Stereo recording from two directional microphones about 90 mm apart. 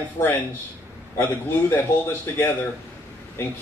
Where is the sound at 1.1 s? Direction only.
30° left (ahead or behind).